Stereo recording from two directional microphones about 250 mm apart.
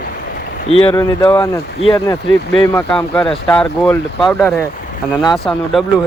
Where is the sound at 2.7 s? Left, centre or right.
Centre.